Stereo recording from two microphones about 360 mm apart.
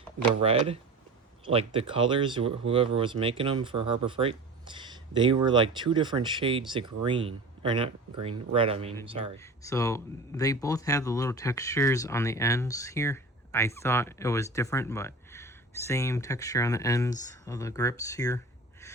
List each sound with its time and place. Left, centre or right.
1.5 s speech: centre
9.6 s speech: centre